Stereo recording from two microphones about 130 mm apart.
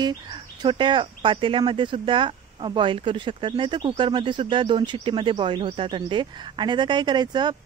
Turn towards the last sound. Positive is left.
turn(degrees=-35)  # may be behind; listen again after turning